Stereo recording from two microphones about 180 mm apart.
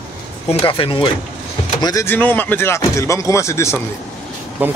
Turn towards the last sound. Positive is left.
turn(degrees=-10)  # may be behind; listen again after turning